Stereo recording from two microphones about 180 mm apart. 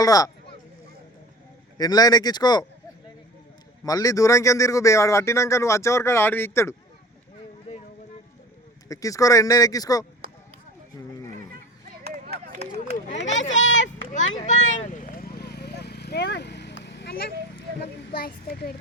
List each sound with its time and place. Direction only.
0.0 s speech: 20° left (ahead or behind)
1.8 s speech: 20° left (ahead or behind)
3.8 s speech: 20° left (ahead or behind)
8.9 s speech: 20° left (ahead or behind)
12.0 s chop: 55° right (ahead or behind)
12.7 s run: 35° left (ahead or behind)
13.7 s a sound: 90° left
14.4 s vehicle: 45° left (ahead or behind); by 17.3 s 70° left (ahead or behind)